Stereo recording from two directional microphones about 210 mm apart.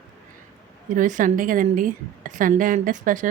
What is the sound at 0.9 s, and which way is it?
A woman's voice, 40° right (ahead or behind).